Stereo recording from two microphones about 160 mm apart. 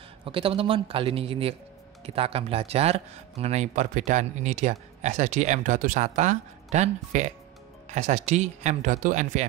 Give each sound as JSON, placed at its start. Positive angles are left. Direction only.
{"t": 0.2, "sound": "a man's voice", "side_deg": -35}